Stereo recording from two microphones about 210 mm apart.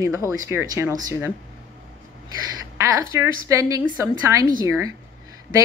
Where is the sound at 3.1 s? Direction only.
15° right (ahead or behind).